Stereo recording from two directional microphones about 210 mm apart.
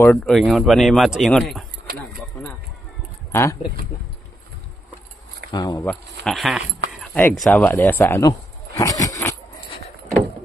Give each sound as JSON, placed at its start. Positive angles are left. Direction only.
{"t": 0.0, "sound": "speech", "side_deg": 5}
{"t": 3.3, "sound": "a sound", "side_deg": 15}
{"t": 5.5, "sound": "speech", "side_deg": 20}
{"t": 5.9, "sound": "speech", "side_deg": 0}